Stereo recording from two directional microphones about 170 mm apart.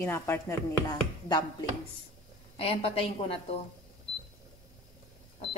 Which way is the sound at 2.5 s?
35° left (ahead or behind).